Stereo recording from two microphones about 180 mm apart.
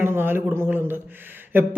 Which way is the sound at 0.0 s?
10° right (ahead or behind).